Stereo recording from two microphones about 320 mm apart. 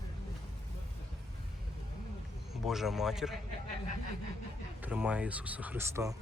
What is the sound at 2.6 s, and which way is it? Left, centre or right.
Speech, centre.